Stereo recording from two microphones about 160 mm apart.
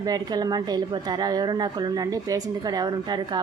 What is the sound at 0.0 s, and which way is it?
Speech, 25° right (ahead or behind).